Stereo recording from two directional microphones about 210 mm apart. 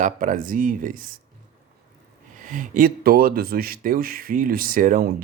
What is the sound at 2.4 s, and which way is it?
Speech, 40° right (ahead or behind).